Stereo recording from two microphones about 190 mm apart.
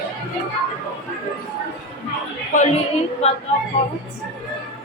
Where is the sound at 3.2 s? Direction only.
30° left (ahead or behind).